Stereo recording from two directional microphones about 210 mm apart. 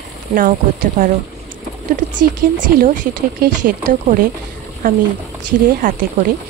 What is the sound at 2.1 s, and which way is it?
Speech, 40° right (ahead or behind).